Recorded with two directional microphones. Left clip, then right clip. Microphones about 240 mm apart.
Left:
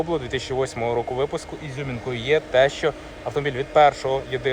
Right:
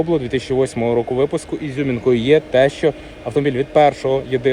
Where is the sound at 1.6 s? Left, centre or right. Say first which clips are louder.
Right 12 dB; centre.